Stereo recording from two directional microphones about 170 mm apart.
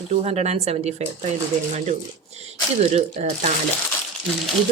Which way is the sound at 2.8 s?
40° right (ahead or behind).